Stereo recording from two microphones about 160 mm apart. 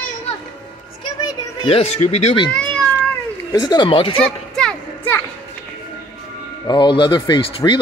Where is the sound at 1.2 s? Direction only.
35° left (ahead or behind).